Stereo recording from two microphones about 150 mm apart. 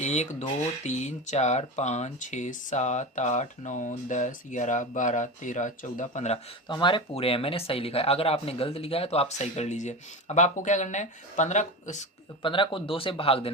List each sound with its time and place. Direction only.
0.0 s speech: 50° left (ahead or behind)
6.7 s speech: 30° left (ahead or behind); by 12.0 s 55° left (ahead or behind)
12.4 s speech: 35° left (ahead or behind)